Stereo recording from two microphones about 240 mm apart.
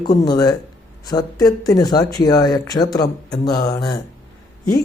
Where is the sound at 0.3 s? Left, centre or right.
Centre.